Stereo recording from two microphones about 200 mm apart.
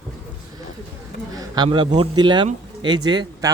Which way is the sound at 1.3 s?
20° right (ahead or behind).